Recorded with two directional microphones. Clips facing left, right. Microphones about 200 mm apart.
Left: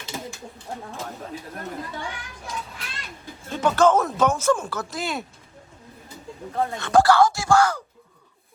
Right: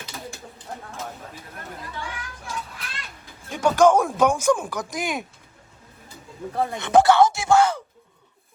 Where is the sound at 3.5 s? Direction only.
10° right (ahead or behind).